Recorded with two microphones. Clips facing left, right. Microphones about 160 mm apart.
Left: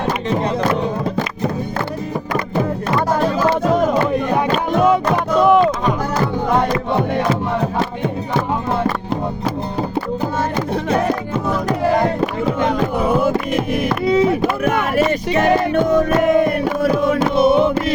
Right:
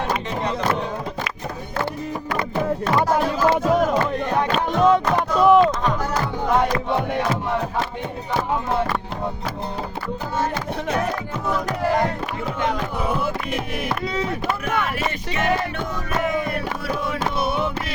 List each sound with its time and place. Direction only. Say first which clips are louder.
4.1 s a sound: left 4 dB; 10° left (ahead or behind)
4.7 s music: left 2 dB; 5° left (ahead or behind)
5.4 s a sound: left 1 dB; centre (ahead or behind)
13.0 s chant: left 8 dB; 45° left (ahead or behind)
14.1 s chop: left 11 dB; 10° left (ahead or behind)
14.6 s music: left 8 dB; 45° left (ahead or behind)
17.3 s music: left 12 dB; 20° left (ahead or behind)